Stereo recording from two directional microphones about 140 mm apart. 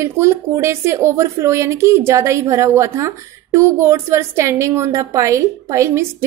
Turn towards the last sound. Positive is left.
turn(degrees=-20)  # may be behind; listen again after turning